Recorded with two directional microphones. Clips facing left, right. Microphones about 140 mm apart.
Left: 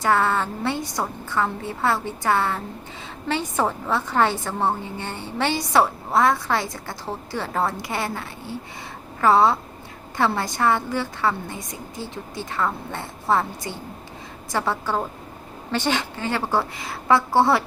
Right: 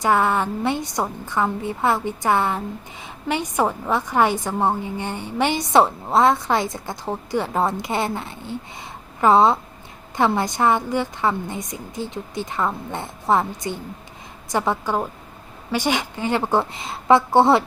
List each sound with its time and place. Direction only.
0.0 s a woman's voice: 15° right (ahead or behind)